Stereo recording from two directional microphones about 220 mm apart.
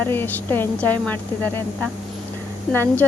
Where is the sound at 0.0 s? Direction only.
10° left (ahead or behind).